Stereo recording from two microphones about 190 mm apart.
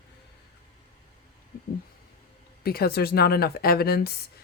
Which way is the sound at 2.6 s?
55° left (ahead or behind).